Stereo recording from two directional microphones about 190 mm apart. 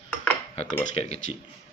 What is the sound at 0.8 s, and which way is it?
Speech, 35° left (ahead or behind).